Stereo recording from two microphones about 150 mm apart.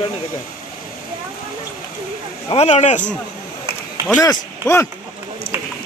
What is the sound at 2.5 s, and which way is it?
Speech, 45° left (ahead or behind).